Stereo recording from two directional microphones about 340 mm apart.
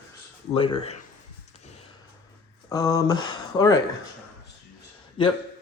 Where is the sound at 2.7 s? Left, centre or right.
Centre.